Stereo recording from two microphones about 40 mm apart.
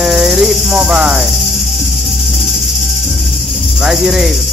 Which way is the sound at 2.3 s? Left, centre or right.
Centre.